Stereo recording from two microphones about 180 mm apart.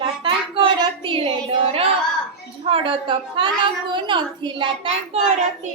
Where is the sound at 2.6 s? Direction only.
30° right (ahead or behind).